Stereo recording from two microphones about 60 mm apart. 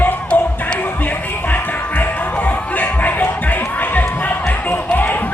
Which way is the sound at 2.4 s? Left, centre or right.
Left.